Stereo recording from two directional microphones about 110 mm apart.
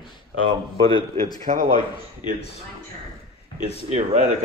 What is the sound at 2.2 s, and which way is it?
Speech, 50° left (ahead or behind).